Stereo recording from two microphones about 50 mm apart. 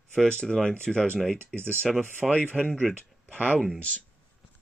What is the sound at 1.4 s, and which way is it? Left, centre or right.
Speech, right.